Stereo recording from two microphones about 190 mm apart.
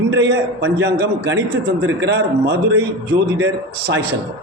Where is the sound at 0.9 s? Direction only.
60° right (ahead or behind).